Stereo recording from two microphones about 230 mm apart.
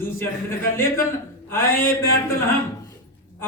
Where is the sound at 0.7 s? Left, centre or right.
Centre.